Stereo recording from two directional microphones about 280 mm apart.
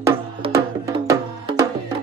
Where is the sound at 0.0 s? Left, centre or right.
Centre.